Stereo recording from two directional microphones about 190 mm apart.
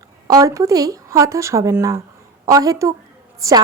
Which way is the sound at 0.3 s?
20° right (ahead or behind).